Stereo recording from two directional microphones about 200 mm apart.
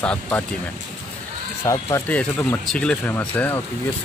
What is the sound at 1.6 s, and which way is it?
Speech, 15° left (ahead or behind).